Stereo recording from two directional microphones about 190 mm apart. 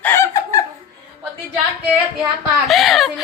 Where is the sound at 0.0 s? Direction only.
15° left (ahead or behind).